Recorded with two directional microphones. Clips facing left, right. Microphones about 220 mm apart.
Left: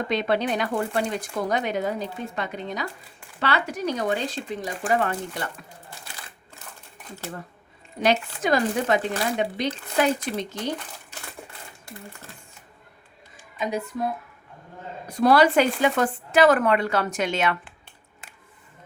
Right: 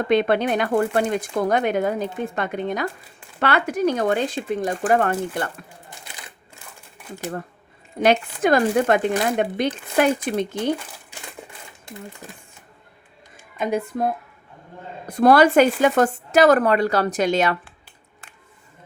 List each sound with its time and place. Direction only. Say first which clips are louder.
0.1 s speech: right 6 dB; 55° right (ahead or behind)
8.0 s speech: right 5 dB; 55° right (ahead or behind)
12.2 s speech: right 5 dB; 15° right (ahead or behind)
13.6 s speech: right 4 dB; 55° right (ahead or behind); by 17.6 s 40° right (ahead or behind)